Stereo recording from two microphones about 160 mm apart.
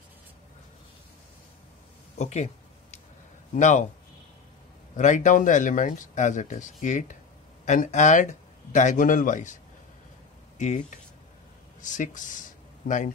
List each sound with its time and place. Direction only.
2.1 s a sound: 45° left (ahead or behind)
3.5 s speech: 50° left (ahead or behind)
4.9 s speech: 50° left (ahead or behind)
11.8 s speech: 50° left (ahead or behind)